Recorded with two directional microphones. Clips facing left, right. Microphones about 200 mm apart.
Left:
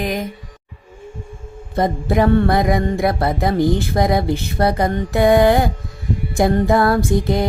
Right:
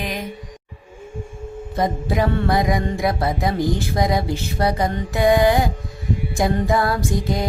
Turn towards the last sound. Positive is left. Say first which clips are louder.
# left 5 dB
turn(degrees=55)  # may be behind; listen again after turning